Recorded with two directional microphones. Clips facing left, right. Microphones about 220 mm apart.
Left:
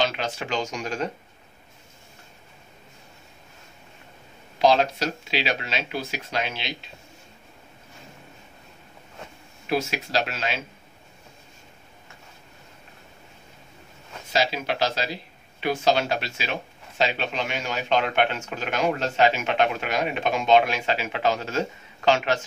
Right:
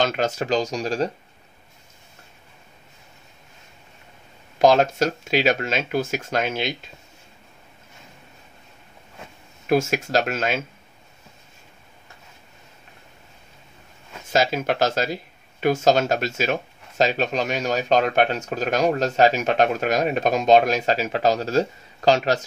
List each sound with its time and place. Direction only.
0.0 s speech: 45° right (ahead or behind)
4.6 s speech: 50° right (ahead or behind)
9.7 s speech: 50° right (ahead or behind)
14.3 s speech: 45° right (ahead or behind)